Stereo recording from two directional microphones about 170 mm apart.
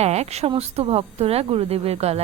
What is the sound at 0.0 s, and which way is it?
A woman's voice, 40° right (ahead or behind).